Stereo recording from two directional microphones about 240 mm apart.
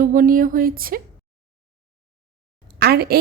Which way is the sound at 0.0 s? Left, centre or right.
Right.